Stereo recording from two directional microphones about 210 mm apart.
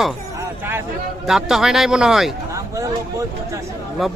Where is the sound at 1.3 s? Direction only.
Centre (ahead or behind).